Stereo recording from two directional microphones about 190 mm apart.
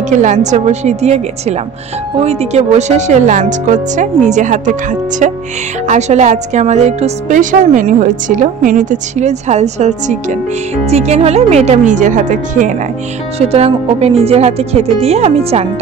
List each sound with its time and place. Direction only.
0.1 s a woman's voice: 40° right (ahead or behind)
5.9 s a woman's voice: 35° right (ahead or behind)